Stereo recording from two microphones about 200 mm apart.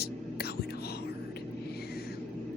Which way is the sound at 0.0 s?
50° left (ahead or behind).